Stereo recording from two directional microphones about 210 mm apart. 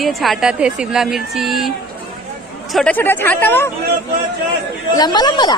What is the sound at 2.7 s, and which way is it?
Speech, 5° left (ahead or behind).